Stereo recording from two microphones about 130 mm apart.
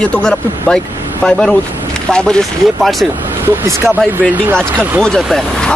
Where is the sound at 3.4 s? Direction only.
20° right (ahead or behind).